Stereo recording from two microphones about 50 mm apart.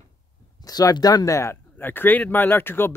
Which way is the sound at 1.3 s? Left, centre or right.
Left.